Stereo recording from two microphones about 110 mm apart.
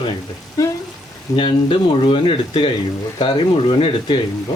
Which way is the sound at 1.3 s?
50° left (ahead or behind).